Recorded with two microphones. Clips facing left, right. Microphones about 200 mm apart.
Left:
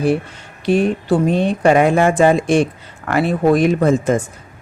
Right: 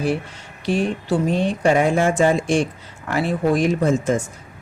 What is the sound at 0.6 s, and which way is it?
Speech, 60° left (ahead or behind).